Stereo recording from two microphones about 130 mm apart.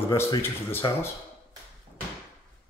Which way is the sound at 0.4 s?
15° left (ahead or behind).